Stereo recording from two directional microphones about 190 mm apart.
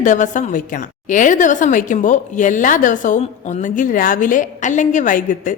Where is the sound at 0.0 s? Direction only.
40° left (ahead or behind).